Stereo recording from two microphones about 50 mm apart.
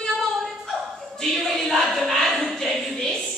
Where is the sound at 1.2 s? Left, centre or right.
Centre.